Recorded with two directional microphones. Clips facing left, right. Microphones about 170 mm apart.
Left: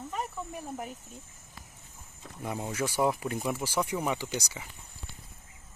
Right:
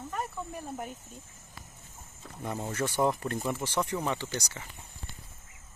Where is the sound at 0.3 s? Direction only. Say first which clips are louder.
Even; 5° left (ahead or behind).